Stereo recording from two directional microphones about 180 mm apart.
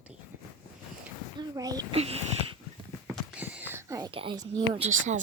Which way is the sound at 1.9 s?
35° right (ahead or behind).